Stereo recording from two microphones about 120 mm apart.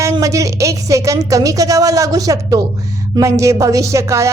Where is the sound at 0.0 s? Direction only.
25° right (ahead or behind).